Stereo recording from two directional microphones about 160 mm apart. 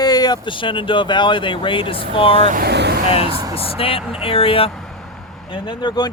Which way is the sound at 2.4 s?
70° right (ahead or behind).